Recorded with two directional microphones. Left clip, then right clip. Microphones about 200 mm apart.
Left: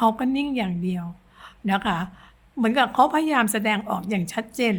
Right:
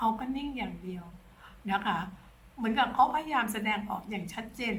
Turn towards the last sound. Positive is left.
turn(degrees=50)  # may be behind; listen again after turning